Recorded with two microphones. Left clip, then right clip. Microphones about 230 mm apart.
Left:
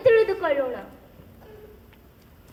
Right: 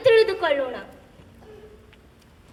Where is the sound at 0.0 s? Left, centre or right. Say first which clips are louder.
Right 1 dB; right.